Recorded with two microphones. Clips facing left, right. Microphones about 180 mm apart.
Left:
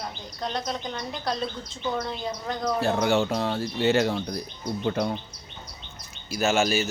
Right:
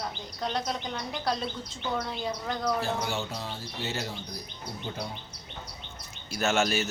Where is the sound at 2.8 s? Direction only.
60° left (ahead or behind).